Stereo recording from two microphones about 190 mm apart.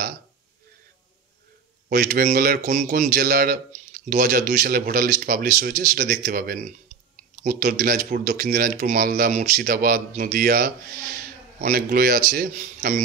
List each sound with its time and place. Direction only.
1.9 s a man's voice: 50° right (ahead or behind)